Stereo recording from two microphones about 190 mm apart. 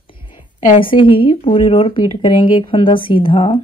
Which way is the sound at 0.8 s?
25° left (ahead or behind).